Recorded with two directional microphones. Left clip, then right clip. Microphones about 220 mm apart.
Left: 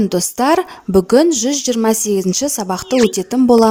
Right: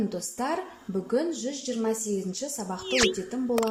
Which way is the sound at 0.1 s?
45° left (ahead or behind).